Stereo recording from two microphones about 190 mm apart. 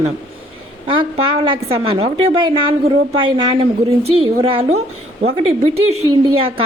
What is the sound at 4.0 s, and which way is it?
A woman's voice, 30° right (ahead or behind).